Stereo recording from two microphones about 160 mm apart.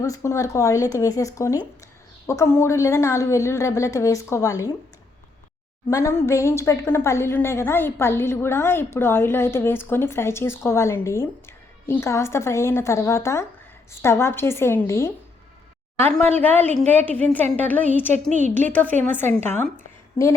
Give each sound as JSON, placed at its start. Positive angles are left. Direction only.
{"t": 0.0, "sound": "a woman's voice", "side_deg": 20}
{"t": 5.9, "sound": "a woman's voice", "side_deg": 15}
{"t": 18.1, "sound": "a woman's voice", "side_deg": -50}
{"t": 18.7, "sound": "a woman's voice", "side_deg": 10}